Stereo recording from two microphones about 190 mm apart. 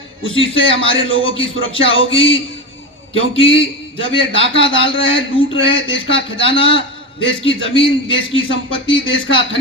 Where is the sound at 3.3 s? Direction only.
30° left (ahead or behind).